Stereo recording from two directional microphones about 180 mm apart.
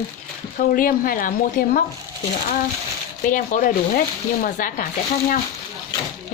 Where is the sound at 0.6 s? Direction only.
50° left (ahead or behind).